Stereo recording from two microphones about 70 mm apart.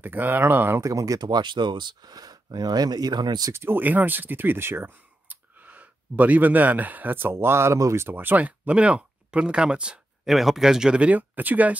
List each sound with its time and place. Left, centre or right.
0.0 s speech: right
0.7 s speech: right
1.2 s speech: right
3.5 s speech: right
7.3 s speech: right; by 9.9 s centre
10.2 s speech: centre; by 11.7 s right